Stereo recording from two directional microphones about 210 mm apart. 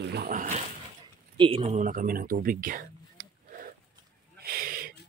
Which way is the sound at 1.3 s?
25° right (ahead or behind).